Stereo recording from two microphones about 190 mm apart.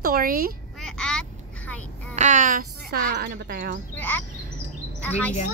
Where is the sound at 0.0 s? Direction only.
50° right (ahead or behind).